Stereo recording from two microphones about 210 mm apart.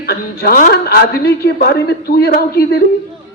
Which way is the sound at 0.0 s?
50° left (ahead or behind).